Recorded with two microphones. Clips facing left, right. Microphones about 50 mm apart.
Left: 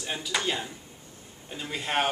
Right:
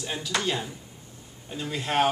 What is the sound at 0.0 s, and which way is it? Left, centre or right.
Speech, centre.